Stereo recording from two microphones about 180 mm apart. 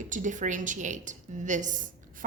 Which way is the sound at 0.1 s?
45° right (ahead or behind).